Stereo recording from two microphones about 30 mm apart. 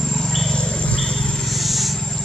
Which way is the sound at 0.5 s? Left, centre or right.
Left.